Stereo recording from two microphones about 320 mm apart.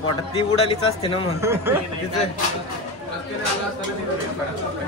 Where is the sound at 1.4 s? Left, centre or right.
Centre.